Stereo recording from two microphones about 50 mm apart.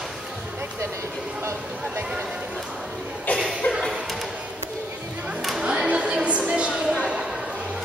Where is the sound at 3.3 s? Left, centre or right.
Left.